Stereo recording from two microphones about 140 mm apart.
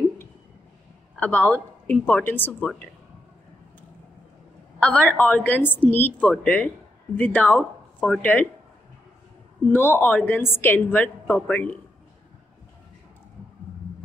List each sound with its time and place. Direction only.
1.1 s a woman's voice: 10° left (ahead or behind)
4.7 s a woman's voice: 10° left (ahead or behind)
9.7 s a woman's voice: 15° left (ahead or behind)